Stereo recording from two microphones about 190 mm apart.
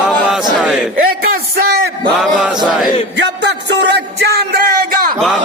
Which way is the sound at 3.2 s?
65° right (ahead or behind).